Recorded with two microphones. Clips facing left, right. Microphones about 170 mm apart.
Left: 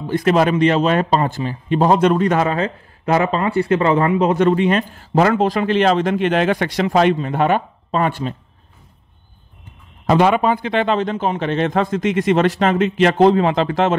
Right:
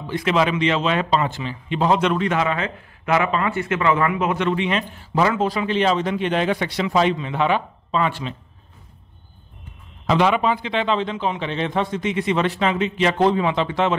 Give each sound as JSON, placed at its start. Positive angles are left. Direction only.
{"t": 0.0, "sound": "speech", "side_deg": 45}
{"t": 7.2, "sound": "speech", "side_deg": 45}
{"t": 10.0, "sound": "speech", "side_deg": 50}